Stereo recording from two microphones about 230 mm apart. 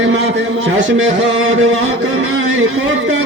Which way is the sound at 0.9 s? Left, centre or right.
Right.